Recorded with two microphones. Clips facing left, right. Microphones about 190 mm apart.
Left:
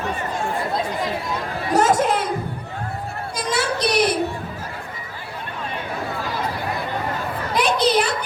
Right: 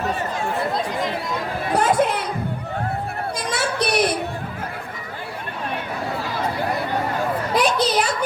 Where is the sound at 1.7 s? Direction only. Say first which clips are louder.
Left 2 dB; 45° left (ahead or behind).